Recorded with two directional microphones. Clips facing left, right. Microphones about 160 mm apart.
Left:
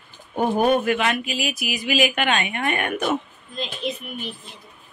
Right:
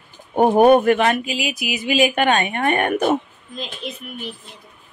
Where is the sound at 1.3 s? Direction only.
20° right (ahead or behind).